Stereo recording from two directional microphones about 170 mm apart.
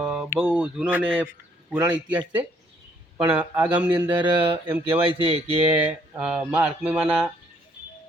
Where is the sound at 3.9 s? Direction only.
25° right (ahead or behind).